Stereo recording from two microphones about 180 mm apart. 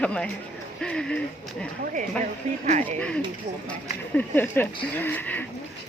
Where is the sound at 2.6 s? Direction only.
40° right (ahead or behind).